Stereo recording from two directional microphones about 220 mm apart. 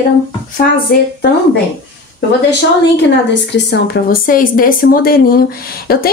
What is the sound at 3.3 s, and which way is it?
Speech, 50° left (ahead or behind).